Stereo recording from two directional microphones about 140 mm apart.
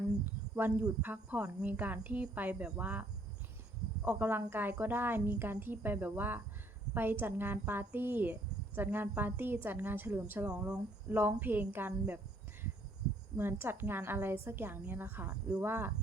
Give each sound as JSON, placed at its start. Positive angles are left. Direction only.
{"t": 0.3, "sound": "speech", "side_deg": -15}
{"t": 13.3, "sound": "speech", "side_deg": -15}